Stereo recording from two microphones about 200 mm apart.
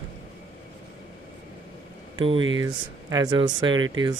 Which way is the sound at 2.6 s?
20° right (ahead or behind).